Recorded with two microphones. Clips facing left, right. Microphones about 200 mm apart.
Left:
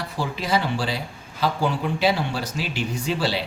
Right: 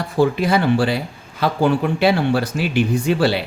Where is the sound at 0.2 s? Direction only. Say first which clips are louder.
Right 8 dB; 55° right (ahead or behind).